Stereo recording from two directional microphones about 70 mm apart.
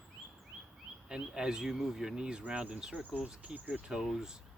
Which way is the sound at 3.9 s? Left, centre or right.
Centre.